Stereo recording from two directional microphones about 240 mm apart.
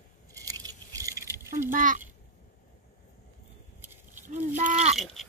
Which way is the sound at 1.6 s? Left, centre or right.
Right.